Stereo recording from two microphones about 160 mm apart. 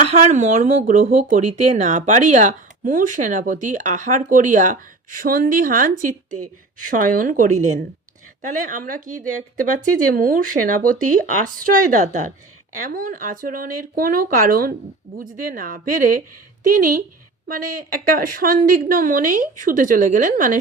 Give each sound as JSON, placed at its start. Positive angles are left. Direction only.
{"t": 0.1, "sound": "a woman's voice", "side_deg": -50}